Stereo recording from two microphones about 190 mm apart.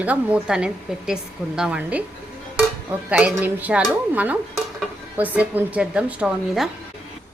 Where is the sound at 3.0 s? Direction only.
5° right (ahead or behind).